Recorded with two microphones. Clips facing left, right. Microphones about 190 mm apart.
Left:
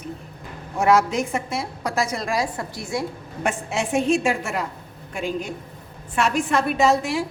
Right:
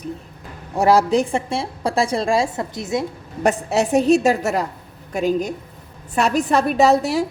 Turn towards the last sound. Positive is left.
turn(degrees=-40)  # may be behind; listen again after turning